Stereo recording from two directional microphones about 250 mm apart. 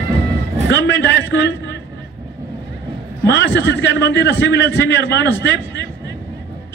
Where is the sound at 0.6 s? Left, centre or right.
Left.